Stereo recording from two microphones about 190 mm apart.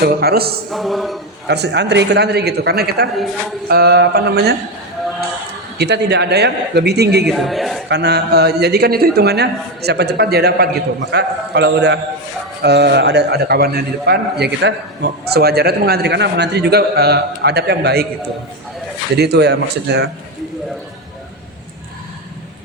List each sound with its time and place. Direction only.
0.0 s a man's voice: 55° right (ahead or behind)
0.7 s a sound: centre (ahead or behind)
1.5 s a man's voice: 65° right (ahead or behind)
5.7 s a man's voice: 60° right (ahead or behind)
7.3 s a man's voice: centre (ahead or behind)
7.9 s a man's voice: 60° right (ahead or behind)
19.1 s a man's voice: 60° right (ahead or behind)